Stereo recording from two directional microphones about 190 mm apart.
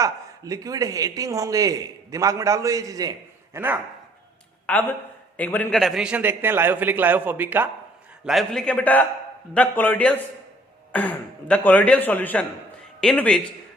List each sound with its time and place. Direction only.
0.0 s speech: 20° right (ahead or behind)
4.6 s a man's voice: 10° left (ahead or behind)